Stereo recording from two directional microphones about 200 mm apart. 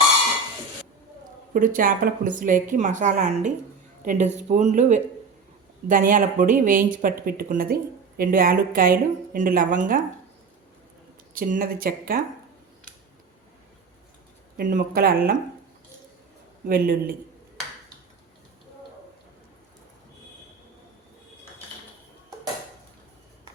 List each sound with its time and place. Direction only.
1.5 s a woman's voice: 40° right (ahead or behind)
11.3 s speech: 45° right (ahead or behind)
14.5 s speech: 45° right (ahead or behind)
16.6 s speech: 45° right (ahead or behind)